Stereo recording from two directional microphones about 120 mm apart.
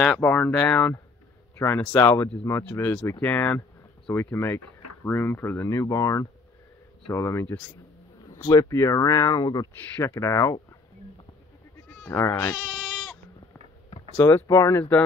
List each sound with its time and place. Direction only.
0.0 s speech: 10° left (ahead or behind); by 9.7 s 35° left (ahead or behind)
9.9 s speech: 25° left (ahead or behind)
12.0 s speech: 20° left (ahead or behind)
12.3 s speech: 35° left (ahead or behind)
14.1 s speech: 20° left (ahead or behind)
14.5 s speech: 30° left (ahead or behind)
14.8 s speech: 15° left (ahead or behind)